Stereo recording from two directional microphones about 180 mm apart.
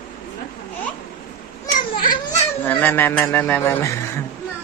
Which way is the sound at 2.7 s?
10° left (ahead or behind).